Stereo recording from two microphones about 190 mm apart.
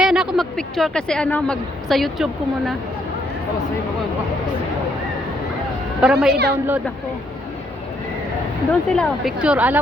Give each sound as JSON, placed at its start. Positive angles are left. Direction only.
{"t": 0.0, "sound": "speech", "side_deg": -5}
{"t": 6.0, "sound": "speech", "side_deg": -5}
{"t": 6.3, "sound": "a woman's voice", "side_deg": -55}
{"t": 8.9, "sound": "speech", "side_deg": 0}